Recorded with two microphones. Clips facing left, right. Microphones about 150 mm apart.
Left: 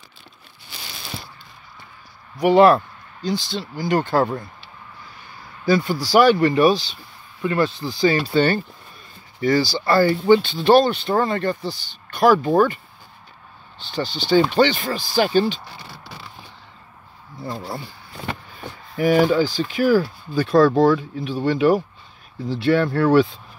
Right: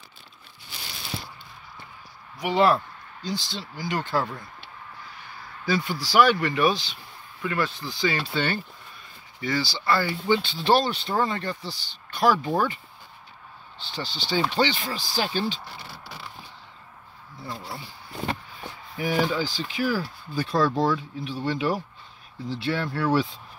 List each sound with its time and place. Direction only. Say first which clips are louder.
2.4 s speech: left 8 dB; 55° left (ahead or behind)
5.7 s speech: left 8 dB; 45° left (ahead or behind)
13.8 s speech: left 9 dB; 50° left (ahead or behind)
17.5 s speech: left 7 dB; 50° left (ahead or behind)
18.9 s speech: left 9 dB; 55° left (ahead or behind)
20.3 s speech: left 8 dB; 65° left (ahead or behind)